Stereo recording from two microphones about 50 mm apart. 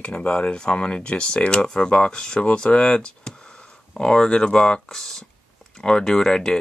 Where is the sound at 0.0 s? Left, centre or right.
Left.